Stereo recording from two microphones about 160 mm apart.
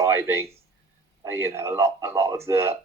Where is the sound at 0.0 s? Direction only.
15° right (ahead or behind).